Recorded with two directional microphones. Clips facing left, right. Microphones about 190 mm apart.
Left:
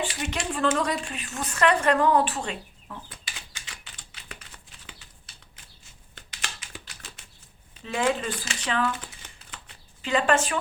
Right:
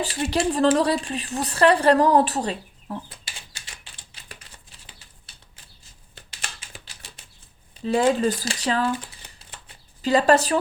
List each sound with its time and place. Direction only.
0.0 s speech: 35° right (ahead or behind)
4.1 s typing: 35° right (ahead or behind)
7.9 s speech: 35° right (ahead or behind)